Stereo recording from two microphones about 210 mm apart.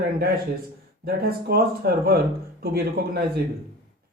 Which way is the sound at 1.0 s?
45° right (ahead or behind).